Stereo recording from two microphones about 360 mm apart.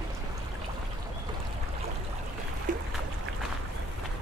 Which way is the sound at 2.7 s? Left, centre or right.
Right.